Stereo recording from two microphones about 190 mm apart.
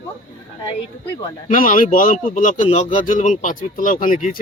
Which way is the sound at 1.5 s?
45° left (ahead or behind).